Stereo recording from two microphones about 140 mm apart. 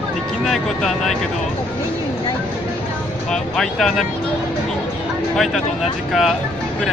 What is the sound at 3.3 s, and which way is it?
Vehicle, 5° left (ahead or behind).